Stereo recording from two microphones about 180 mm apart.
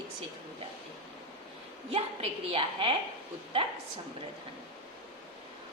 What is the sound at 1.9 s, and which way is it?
A woman's voice, 30° right (ahead or behind).